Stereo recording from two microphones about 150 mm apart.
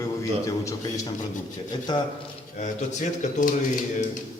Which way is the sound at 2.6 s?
50° left (ahead or behind).